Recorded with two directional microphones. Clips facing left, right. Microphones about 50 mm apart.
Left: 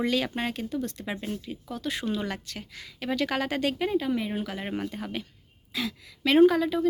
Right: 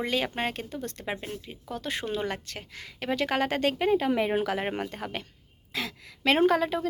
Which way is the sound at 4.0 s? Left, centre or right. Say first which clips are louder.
Right 3 dB; right.